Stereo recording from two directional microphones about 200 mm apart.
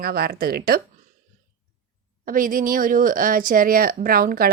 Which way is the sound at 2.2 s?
45° right (ahead or behind).